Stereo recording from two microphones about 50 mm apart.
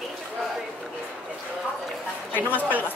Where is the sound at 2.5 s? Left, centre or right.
Right.